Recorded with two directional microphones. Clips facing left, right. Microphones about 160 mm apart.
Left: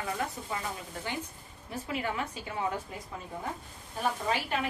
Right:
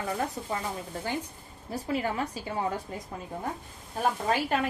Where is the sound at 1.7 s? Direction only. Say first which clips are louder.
Right 4 dB; 35° right (ahead or behind).